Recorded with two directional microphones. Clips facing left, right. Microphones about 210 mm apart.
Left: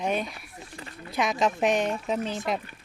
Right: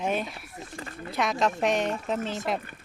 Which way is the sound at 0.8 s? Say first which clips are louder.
Right 4 dB; 50° right (ahead or behind).